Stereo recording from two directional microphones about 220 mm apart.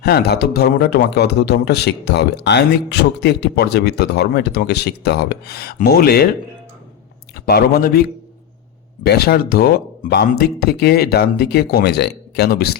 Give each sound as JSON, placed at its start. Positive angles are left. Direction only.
{"t": 0.0, "sound": "speech", "side_deg": 45}
{"t": 7.3, "sound": "speech", "side_deg": 45}
{"t": 9.0, "sound": "speech", "side_deg": 45}